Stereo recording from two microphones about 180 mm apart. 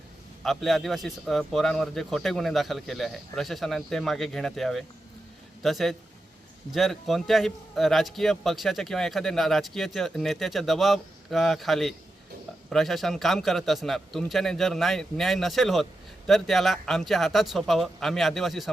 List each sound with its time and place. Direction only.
0.4 s a man's voice: centre (ahead or behind)